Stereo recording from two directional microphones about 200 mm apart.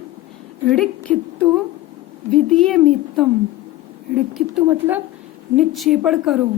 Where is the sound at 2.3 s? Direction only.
Centre (ahead or behind).